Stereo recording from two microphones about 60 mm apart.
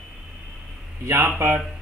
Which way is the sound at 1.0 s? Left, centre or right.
Right.